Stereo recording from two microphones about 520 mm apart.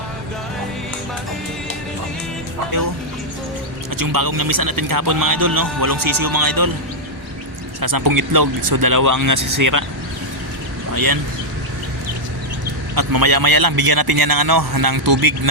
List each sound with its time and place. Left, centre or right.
3.9 s a man's voice: right
7.8 s a man's voice: right
10.9 s speech: right
13.0 s a man's voice: right